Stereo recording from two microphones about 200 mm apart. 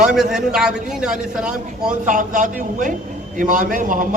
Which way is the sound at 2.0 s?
40° right (ahead or behind).